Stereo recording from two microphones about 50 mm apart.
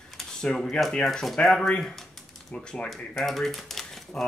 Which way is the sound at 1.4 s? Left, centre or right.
Centre.